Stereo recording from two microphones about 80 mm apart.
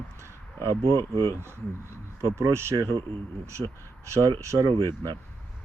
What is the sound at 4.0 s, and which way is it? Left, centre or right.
Speech, right.